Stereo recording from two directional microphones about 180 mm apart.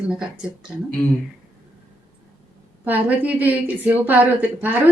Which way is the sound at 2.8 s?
10° right (ahead or behind).